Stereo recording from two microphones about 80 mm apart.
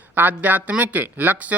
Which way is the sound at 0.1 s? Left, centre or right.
Right.